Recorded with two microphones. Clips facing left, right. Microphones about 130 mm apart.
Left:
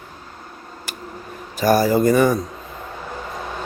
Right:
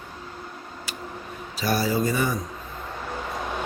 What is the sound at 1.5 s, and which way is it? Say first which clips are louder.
Speech: left 8 dB; 45° left (ahead or behind).